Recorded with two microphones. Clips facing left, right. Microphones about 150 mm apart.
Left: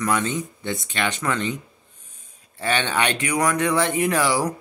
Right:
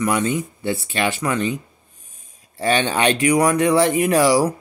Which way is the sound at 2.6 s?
15° right (ahead or behind).